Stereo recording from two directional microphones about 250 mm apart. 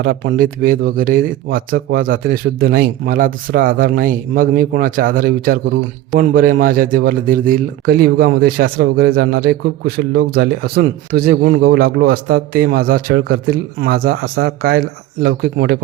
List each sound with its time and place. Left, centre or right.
0.0 s speech: right